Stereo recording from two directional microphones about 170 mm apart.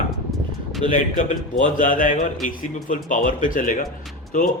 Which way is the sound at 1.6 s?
55° left (ahead or behind).